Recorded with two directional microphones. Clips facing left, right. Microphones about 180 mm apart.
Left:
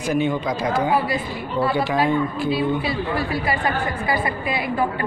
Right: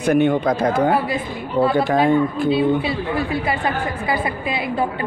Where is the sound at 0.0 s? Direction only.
60° right (ahead or behind).